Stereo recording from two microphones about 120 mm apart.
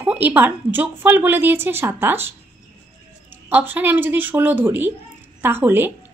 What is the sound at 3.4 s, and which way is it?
A woman's voice, 15° right (ahead or behind).